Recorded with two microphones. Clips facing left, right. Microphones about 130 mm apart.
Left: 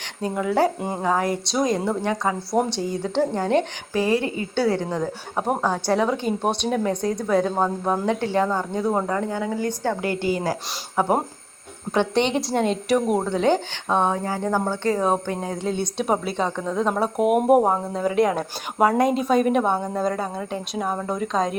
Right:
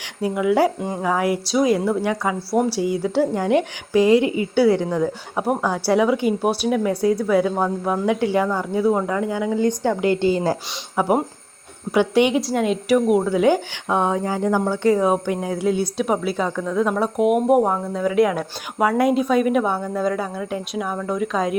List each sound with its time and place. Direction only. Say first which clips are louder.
0.2 s speech: right 3 dB; 10° right (ahead or behind)
8.7 s a woman's voice: right 3 dB; centre (ahead or behind)
9.2 s a woman's voice: right 5 dB; 15° right (ahead or behind)
11.0 s a woman's voice: right 2 dB; 15° right (ahead or behind)
16.5 s a woman's voice: right 2 dB; 25° left (ahead or behind)
16.9 s a woman's voice: even; centre (ahead or behind)
17.6 s speech: right 1 dB; 30° left (ahead or behind)
18.3 s a woman's voice: left 1 dB; centre (ahead or behind)
19.7 s a woman's voice: even; 25° left (ahead or behind)
20.0 s a woman's voice: right 2 dB; centre (ahead or behind)
20.7 s speech: left 1 dB; 30° left (ahead or behind)
21.3 s a woman's voice: right 1 dB; 5° right (ahead or behind)